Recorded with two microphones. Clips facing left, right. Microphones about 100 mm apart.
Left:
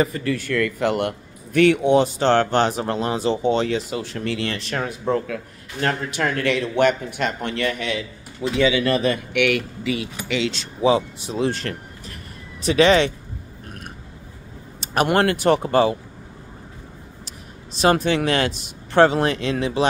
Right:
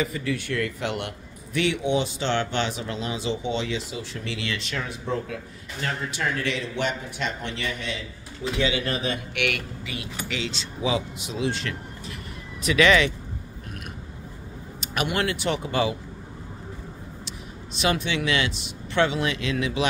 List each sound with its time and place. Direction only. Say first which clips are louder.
0.0 s speech: left 5 dB; 50° left (ahead or behind)
8.5 s speech: left 8 dB; 85° left
9.8 s speech: left 8 dB; 90° left
10.8 s speech: left 8 dB; 35° left (ahead or behind)
12.6 s speech: left 4 dB; 30° left (ahead or behind)
15.0 s speech: left 9 dB; 50° left (ahead or behind)
17.7 s speech: left 7 dB; 40° left (ahead or behind)